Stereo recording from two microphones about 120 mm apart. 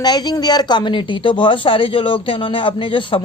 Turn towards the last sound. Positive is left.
turn(degrees=45)  # may be behind; listen again after turning